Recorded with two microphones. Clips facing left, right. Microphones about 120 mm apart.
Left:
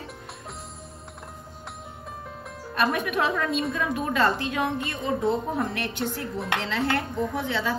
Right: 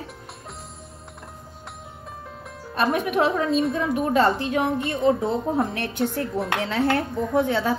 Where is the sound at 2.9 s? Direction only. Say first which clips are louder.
Right 4 dB; 25° right (ahead or behind).